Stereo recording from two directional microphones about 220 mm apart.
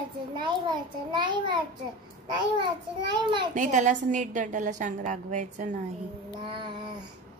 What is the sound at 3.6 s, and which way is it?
A woman's voice, 35° right (ahead or behind).